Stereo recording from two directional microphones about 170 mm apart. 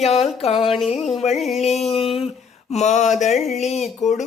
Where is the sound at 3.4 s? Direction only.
Centre (ahead or behind).